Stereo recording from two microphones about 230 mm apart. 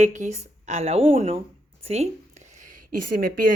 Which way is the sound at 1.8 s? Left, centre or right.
Right.